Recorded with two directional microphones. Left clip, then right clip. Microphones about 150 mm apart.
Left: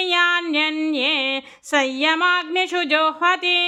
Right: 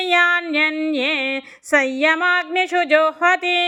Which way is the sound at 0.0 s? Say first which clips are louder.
Right 2 dB; 20° right (ahead or behind).